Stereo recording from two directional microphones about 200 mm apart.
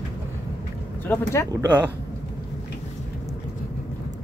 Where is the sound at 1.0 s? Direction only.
10° left (ahead or behind).